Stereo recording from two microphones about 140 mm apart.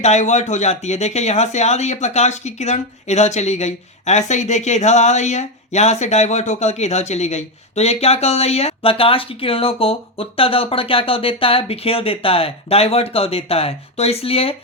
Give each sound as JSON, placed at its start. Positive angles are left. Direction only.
{"t": 0.0, "sound": "speech", "side_deg": 55}